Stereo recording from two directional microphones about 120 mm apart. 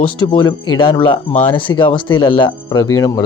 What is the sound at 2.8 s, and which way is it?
Speech, 30° left (ahead or behind).